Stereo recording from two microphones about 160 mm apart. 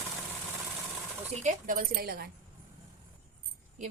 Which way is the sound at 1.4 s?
55° right (ahead or behind).